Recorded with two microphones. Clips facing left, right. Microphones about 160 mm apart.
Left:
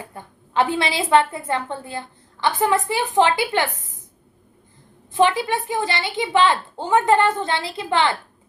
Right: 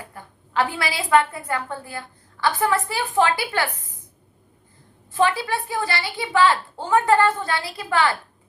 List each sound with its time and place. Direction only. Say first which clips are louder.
0.1 s a woman's voice: left 2 dB; 25° left (ahead or behind)
5.1 s a woman's voice: left 3 dB; 20° left (ahead or behind)